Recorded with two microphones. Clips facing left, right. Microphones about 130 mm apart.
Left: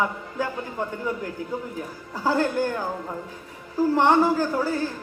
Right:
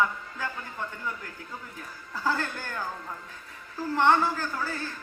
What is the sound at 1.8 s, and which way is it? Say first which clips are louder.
A woman's voice: left 5 dB; 15° left (ahead or behind).